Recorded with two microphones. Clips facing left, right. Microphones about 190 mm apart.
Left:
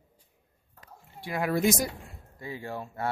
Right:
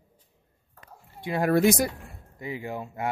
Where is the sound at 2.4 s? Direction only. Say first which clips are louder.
Right 3 dB; 15° right (ahead or behind).